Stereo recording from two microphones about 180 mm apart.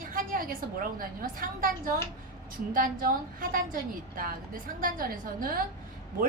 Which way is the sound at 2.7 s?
50° right (ahead or behind).